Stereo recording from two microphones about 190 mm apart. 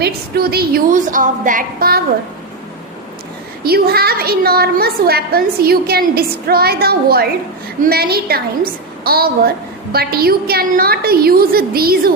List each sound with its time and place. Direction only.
0.0 s a woman's voice: 55° right (ahead or behind)
3.6 s a woman's voice: 55° right (ahead or behind)